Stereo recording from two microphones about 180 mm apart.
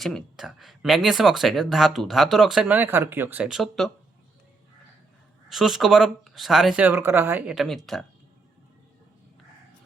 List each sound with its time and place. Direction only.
0.0 s speech: centre (ahead or behind)
5.5 s speech: centre (ahead or behind)